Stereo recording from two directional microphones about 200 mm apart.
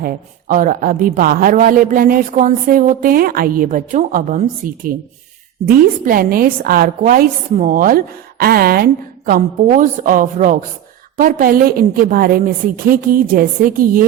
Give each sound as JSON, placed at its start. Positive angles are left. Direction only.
{"t": 0.0, "sound": "a woman's voice", "side_deg": -45}